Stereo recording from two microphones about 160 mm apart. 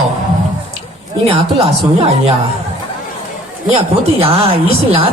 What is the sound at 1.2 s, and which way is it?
Speech, 40° right (ahead or behind).